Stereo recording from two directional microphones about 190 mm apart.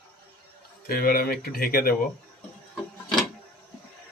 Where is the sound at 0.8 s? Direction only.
50° left (ahead or behind).